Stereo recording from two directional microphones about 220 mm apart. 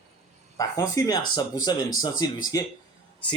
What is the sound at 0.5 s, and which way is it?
Speech, 15° left (ahead or behind).